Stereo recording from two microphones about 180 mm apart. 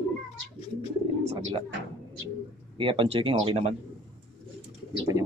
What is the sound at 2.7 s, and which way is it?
Speech, 30° right (ahead or behind).